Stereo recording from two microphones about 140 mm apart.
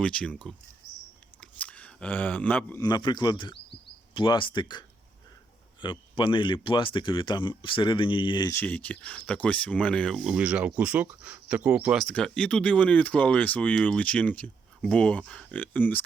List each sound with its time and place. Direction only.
0.0 s speech: 5° left (ahead or behind)
1.4 s chewing: 10° left (ahead or behind)
2.8 s speech: 30° left (ahead or behind)
8.4 s speech: 15° left (ahead or behind)
10.2 s speech: 5° right (ahead or behind)
12.0 s speech: 5° left (ahead or behind)